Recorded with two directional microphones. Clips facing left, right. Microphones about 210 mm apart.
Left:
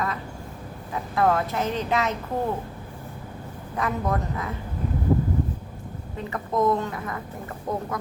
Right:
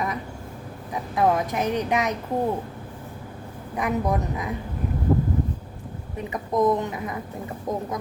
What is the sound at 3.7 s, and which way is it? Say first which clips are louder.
Speech: right 2 dB; 15° right (ahead or behind).